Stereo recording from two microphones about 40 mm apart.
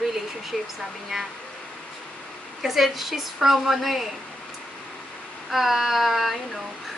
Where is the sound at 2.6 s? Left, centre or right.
Centre.